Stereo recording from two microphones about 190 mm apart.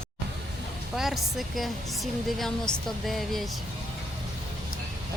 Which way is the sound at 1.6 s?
Centre (ahead or behind).